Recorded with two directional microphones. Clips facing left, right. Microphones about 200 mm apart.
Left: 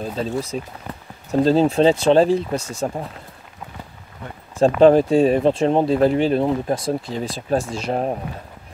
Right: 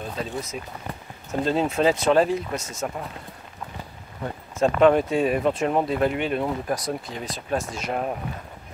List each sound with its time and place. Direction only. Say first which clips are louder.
0.0 s speech: left 6 dB; 30° left (ahead or behind)
4.6 s speech: left 5 dB; 30° left (ahead or behind)